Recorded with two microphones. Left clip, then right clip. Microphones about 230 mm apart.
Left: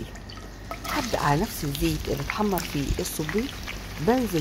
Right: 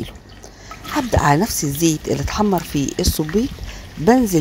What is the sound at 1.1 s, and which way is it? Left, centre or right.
Speech, right.